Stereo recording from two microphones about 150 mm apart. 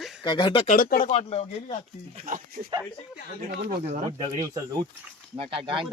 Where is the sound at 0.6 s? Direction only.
65° left (ahead or behind).